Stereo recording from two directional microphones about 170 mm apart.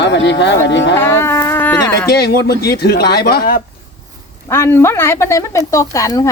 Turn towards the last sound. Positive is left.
turn(degrees=20)  # may be behind; listen again after turning